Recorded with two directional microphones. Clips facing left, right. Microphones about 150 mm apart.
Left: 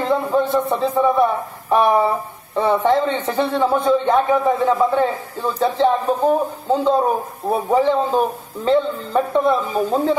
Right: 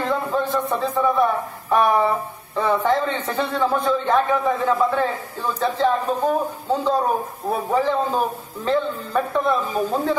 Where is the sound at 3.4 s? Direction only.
10° left (ahead or behind).